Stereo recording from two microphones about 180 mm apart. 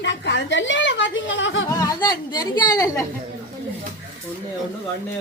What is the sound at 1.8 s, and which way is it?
A woman's voice, 20° left (ahead or behind).